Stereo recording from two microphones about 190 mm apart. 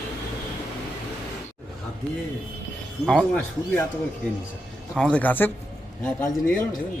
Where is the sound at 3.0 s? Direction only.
Centre (ahead or behind).